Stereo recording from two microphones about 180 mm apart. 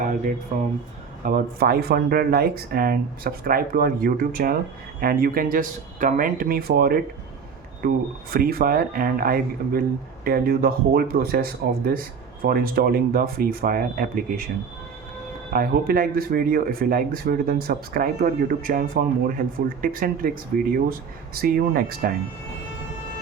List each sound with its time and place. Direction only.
1.2 s speech: 55° right (ahead or behind)
15.5 s speech: 55° right (ahead or behind)